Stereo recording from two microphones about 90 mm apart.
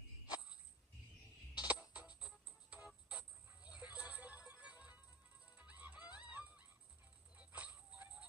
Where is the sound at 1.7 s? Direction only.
15° right (ahead or behind).